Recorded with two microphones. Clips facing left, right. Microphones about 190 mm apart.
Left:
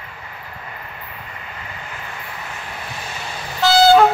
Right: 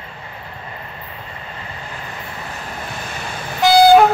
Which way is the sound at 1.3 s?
30° right (ahead or behind).